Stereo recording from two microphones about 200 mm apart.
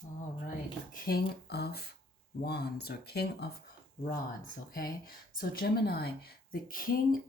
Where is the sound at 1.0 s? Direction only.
50° left (ahead or behind).